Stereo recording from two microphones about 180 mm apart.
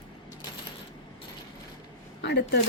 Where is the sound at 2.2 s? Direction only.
70° left (ahead or behind).